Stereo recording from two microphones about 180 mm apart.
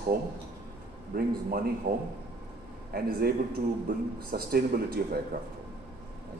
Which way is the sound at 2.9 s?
55° right (ahead or behind).